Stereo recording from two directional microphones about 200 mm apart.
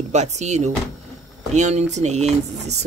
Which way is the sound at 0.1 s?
35° right (ahead or behind).